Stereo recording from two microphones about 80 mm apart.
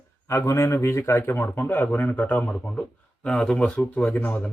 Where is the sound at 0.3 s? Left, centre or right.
Left.